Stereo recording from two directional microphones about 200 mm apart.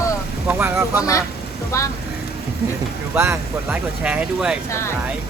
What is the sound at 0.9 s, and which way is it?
Speech, 15° left (ahead or behind).